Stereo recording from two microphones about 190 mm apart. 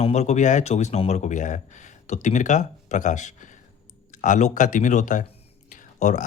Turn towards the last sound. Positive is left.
turn(degrees=40)  # may be behind; listen again after turning